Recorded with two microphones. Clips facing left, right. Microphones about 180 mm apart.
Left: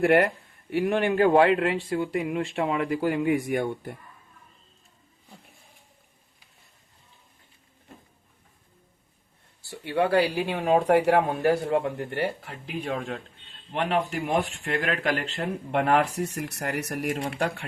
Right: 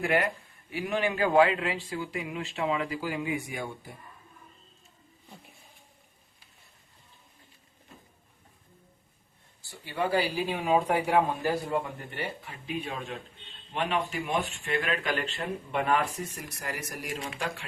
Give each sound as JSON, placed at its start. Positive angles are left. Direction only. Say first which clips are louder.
{"t": 0.0, "sound": "speech", "louder": "left 7 dB", "side_deg": 65}
{"t": 9.6, "sound": "a man's voice", "louder": "left 7 dB", "side_deg": 65}